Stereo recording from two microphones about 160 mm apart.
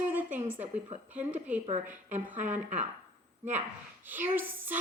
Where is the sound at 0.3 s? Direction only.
45° right (ahead or behind).